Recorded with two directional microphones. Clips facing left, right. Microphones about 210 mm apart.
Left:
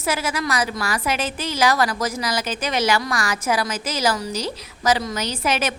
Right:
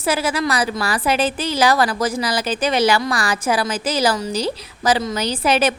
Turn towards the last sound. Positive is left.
turn(degrees=-30)  # may be behind; listen again after turning